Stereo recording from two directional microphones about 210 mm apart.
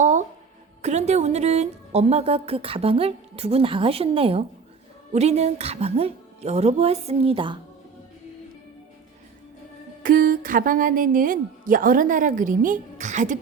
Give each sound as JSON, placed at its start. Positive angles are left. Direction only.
{"t": 0.0, "sound": "music", "side_deg": -35}
{"t": 0.8, "sound": "a woman's voice", "side_deg": -30}
{"t": 10.0, "sound": "a woman's voice", "side_deg": -40}